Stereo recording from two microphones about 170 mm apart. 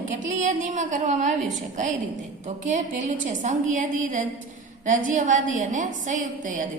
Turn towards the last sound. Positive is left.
turn(degrees=-50)  # may be behind; listen again after turning